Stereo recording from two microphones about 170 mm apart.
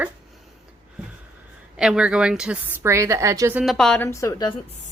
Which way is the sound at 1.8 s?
5° right (ahead or behind).